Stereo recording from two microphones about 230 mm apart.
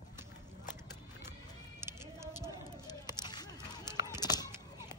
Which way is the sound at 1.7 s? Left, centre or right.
Centre.